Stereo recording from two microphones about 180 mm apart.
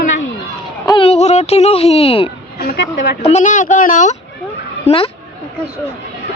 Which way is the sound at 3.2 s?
40° left (ahead or behind).